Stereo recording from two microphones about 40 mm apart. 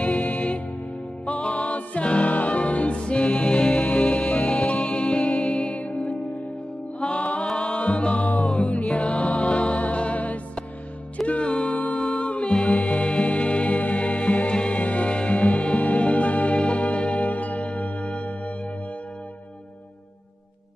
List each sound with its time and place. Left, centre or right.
0.0 s music: left
7.0 s music: left
11.7 s music: left
12.0 s music: left